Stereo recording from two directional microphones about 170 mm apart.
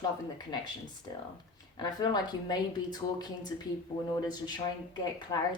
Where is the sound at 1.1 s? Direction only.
20° left (ahead or behind).